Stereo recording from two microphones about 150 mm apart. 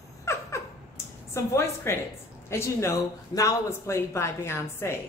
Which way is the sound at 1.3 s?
15° left (ahead or behind).